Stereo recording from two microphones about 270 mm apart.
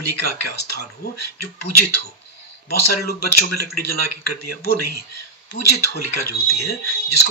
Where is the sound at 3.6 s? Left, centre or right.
Left.